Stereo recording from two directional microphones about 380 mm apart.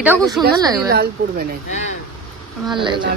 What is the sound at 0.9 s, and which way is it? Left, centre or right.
Speech, right.